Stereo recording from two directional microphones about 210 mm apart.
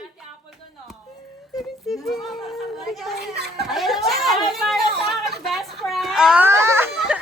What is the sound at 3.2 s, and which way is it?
Speech, 50° right (ahead or behind).